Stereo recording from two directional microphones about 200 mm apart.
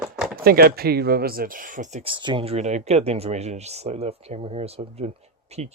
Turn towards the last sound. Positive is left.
turn(degrees=-30)  # may be behind; listen again after turning